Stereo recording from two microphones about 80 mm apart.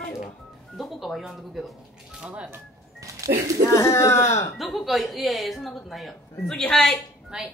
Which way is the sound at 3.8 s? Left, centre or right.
Left.